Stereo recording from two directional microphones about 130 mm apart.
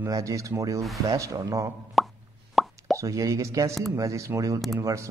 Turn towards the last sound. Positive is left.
turn(degrees=-25)  # may be behind; listen again after turning